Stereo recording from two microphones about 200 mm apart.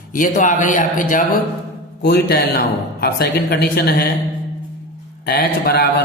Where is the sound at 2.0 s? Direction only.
50° left (ahead or behind).